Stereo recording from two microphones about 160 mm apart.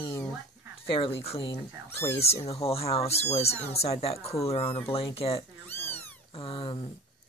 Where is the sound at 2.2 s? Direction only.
40° left (ahead or behind).